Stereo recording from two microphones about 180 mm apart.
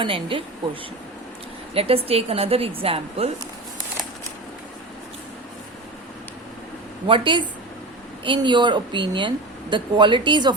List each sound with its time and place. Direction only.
0.0 s a woman's voice: 30° right (ahead or behind)
1.7 s a woman's voice: 30° right (ahead or behind)
7.1 s a woman's voice: 25° right (ahead or behind)